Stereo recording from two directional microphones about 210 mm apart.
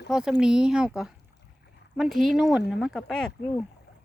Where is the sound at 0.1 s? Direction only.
5° right (ahead or behind).